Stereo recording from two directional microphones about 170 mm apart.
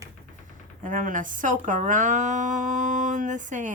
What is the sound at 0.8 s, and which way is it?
A woman's voice, 50° right (ahead or behind).